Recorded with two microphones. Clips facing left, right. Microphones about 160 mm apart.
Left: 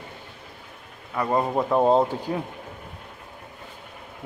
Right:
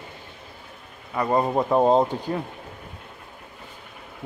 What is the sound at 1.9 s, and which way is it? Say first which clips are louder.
Speech: even; 5° left (ahead or behind).